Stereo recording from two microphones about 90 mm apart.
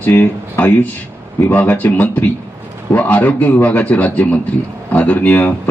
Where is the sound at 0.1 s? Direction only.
25° left (ahead or behind).